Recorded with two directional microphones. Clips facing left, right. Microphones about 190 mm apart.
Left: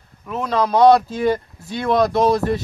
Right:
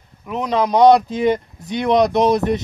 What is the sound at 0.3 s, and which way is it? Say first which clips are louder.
Speech: right 1 dB; 15° right (ahead or behind).